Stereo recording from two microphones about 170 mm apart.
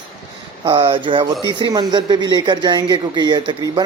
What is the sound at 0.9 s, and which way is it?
Speech, 30° right (ahead or behind).